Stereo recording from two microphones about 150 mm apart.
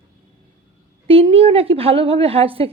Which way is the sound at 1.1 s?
40° right (ahead or behind).